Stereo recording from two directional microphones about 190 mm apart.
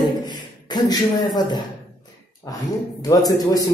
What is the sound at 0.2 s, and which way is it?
Beatboxing, 20° left (ahead or behind).